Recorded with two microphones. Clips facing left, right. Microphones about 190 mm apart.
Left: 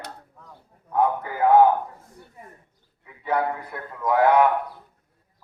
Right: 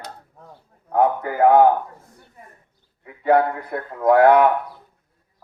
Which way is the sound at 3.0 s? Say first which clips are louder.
Right 7 dB; 60° right (ahead or behind).